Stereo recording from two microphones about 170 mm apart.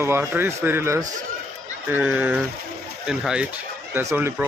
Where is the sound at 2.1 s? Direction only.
10° right (ahead or behind).